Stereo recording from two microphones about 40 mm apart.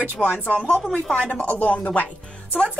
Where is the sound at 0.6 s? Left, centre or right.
Left.